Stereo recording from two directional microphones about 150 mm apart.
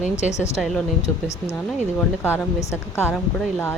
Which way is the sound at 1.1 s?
15° left (ahead or behind).